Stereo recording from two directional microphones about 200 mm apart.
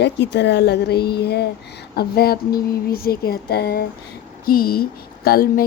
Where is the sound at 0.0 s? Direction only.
60° left (ahead or behind).